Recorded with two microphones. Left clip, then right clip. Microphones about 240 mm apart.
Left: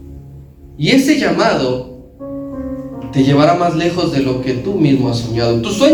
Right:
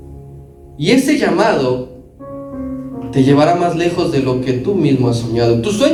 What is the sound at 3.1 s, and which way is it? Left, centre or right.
A man's voice, right.